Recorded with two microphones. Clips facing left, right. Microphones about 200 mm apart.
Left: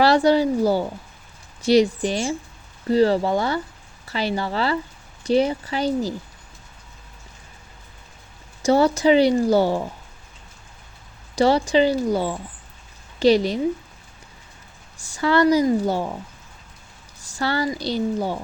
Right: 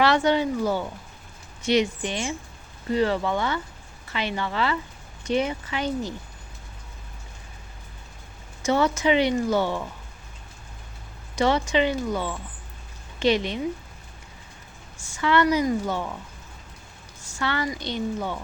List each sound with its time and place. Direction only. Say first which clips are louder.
0.0 s speech: left 4 dB; 35° left (ahead or behind)
8.6 s speech: left 5 dB; 35° left (ahead or behind)
11.3 s a woman's voice: left 5 dB; 35° left (ahead or behind)
15.1 s speech: left 4 dB; 35° left (ahead or behind)
17.3 s speech: left 4 dB; 35° left (ahead or behind)